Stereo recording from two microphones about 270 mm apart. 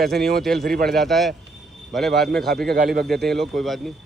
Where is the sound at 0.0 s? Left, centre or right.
Centre.